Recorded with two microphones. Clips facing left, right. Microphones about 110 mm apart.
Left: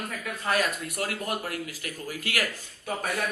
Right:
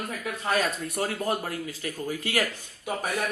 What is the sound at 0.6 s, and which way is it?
Speech, 30° right (ahead or behind).